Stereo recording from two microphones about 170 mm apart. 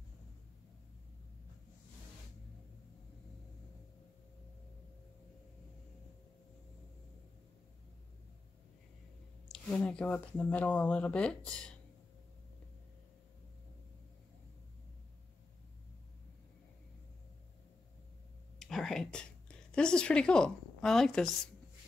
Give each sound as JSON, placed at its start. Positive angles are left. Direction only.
{"t": 9.5, "sound": "speech", "side_deg": 5}
{"t": 18.6, "sound": "a sound", "side_deg": 0}
{"t": 19.7, "sound": "a woman's voice", "side_deg": 5}